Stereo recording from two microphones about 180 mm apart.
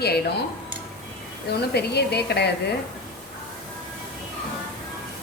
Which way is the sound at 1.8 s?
65° left (ahead or behind).